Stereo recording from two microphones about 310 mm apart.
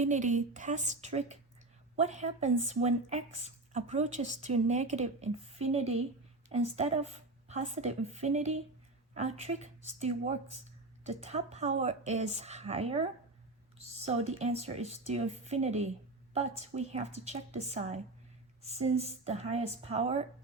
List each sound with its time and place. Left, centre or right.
0.0 s speech: right